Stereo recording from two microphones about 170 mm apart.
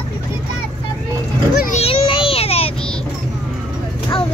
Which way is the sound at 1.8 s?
35° left (ahead or behind).